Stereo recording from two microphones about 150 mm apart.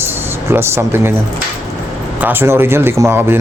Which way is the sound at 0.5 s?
15° right (ahead or behind).